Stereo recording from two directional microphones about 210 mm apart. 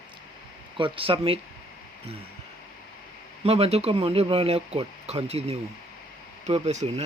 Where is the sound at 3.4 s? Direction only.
30° right (ahead or behind).